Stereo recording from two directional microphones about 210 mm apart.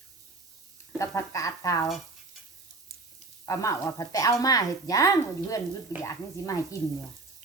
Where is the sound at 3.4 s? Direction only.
15° left (ahead or behind).